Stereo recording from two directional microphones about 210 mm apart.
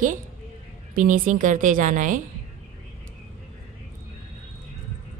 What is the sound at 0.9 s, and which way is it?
A woman's voice, 40° right (ahead or behind).